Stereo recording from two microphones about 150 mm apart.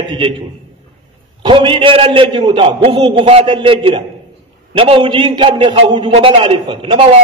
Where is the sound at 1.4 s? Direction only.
35° right (ahead or behind).